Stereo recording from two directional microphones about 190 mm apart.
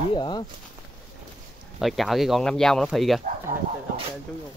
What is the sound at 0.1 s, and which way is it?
Speech, 25° left (ahead or behind).